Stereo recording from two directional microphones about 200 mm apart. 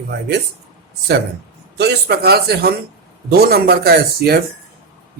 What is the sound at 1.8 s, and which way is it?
A man's voice, 55° right (ahead or behind).